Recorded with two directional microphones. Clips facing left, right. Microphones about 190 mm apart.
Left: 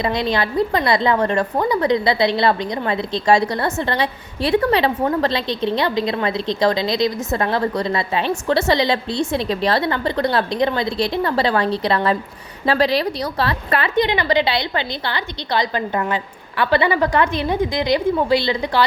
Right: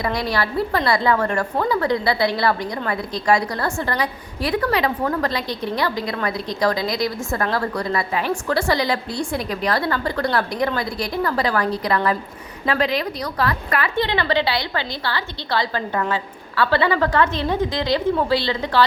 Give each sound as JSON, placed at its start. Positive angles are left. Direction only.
{"t": 0.0, "sound": "a woman's voice", "side_deg": 20}